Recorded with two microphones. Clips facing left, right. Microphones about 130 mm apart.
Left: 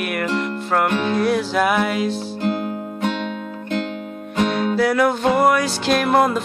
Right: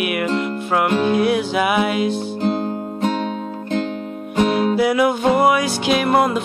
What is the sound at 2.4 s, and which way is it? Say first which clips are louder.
Music: right 1 dB; 30° right (ahead or behind).